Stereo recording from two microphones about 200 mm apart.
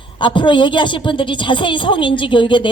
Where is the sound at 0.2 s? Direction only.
25° left (ahead or behind).